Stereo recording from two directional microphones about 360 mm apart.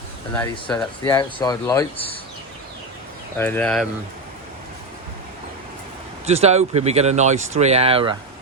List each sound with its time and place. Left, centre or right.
0.3 s speech: centre
3.3 s speech: centre
6.2 s speech: centre